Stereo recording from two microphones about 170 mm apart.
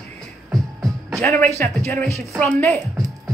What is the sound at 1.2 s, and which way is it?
Speech, 10° left (ahead or behind).